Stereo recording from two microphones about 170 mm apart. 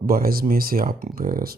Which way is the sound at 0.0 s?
60° right (ahead or behind).